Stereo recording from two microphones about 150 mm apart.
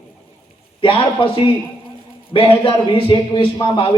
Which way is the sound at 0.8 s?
35° left (ahead or behind).